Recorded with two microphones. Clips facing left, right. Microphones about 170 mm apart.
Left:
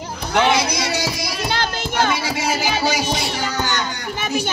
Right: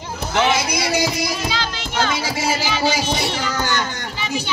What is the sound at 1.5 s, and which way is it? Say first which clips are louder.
Child singing: left 3 dB; 50° left (ahead or behind).